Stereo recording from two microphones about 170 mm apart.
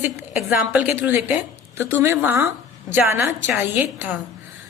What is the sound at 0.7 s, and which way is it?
A woman's voice, 10° right (ahead or behind).